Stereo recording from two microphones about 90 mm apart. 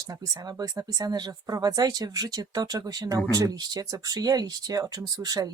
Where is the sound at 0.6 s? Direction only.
45° right (ahead or behind).